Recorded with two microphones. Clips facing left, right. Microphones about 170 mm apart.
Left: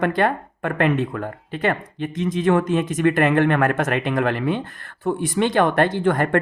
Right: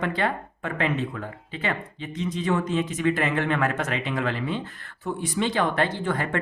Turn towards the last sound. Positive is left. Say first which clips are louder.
# left 8 dB
turn(degrees=55)  # may be behind; listen again after turning